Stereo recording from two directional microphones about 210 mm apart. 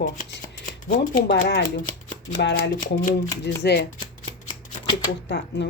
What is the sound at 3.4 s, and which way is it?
Speech, 55° left (ahead or behind).